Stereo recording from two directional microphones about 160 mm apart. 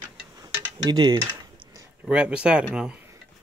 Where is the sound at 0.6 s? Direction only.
25° right (ahead or behind).